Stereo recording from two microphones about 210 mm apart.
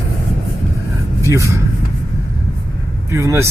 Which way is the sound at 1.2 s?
15° right (ahead or behind).